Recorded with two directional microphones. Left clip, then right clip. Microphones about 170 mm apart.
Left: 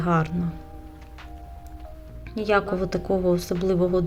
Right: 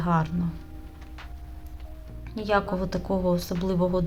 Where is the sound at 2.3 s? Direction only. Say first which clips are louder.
Left 3 dB; 5° left (ahead or behind).